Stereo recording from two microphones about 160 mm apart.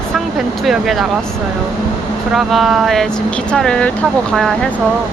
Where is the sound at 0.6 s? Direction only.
Centre (ahead or behind).